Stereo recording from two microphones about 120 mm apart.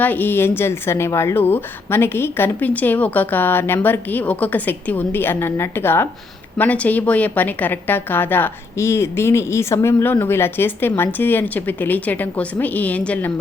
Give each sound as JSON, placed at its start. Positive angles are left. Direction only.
{"t": 0.0, "sound": "a woman's voice", "side_deg": 15}